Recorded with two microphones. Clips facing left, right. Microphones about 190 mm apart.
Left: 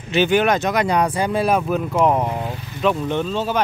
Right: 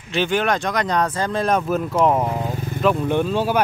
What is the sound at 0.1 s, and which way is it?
Speech, centre (ahead or behind).